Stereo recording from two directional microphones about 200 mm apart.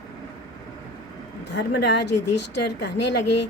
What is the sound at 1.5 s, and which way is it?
Speech, 60° left (ahead or behind).